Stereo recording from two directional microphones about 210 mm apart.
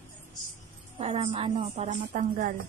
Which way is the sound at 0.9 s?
25° right (ahead or behind).